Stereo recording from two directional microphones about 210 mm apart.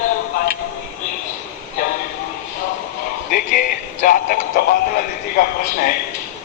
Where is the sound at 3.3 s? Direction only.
40° left (ahead or behind).